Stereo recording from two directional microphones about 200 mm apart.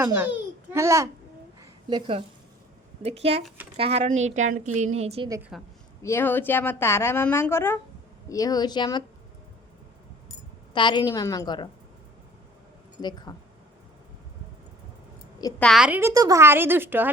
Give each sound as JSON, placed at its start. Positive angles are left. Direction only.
{"t": 0.0, "sound": "a child's voice", "side_deg": -10}
{"t": 1.9, "sound": "a woman's voice", "side_deg": -25}
{"t": 5.5, "sound": "a woman's voice", "side_deg": 0}
{"t": 6.0, "sound": "a woman's voice", "side_deg": 10}
{"t": 10.8, "sound": "a woman's voice", "side_deg": 20}
{"t": 13.0, "sound": "a woman's voice", "side_deg": 20}
{"t": 15.5, "sound": "a woman's voice", "side_deg": 0}